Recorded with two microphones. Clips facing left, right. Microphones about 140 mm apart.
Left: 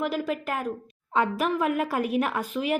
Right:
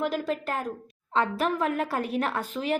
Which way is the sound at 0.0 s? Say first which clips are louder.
Even; 10° left (ahead or behind).